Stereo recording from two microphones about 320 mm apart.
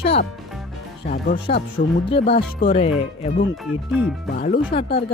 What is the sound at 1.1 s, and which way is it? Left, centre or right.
Speech, left.